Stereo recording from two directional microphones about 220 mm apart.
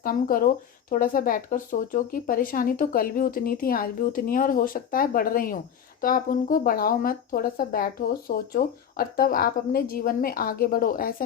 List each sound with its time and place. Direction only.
0.0 s speech: 40° left (ahead or behind)